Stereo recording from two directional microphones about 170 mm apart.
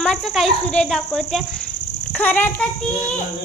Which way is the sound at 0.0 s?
5° left (ahead or behind).